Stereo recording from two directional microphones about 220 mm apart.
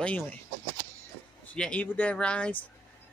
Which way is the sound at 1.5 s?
5° left (ahead or behind).